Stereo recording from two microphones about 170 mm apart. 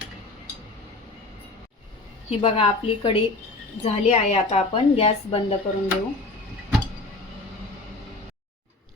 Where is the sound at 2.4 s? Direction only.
35° left (ahead or behind).